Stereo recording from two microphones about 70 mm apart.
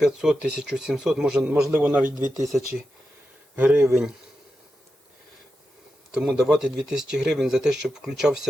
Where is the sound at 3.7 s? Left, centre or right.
Centre.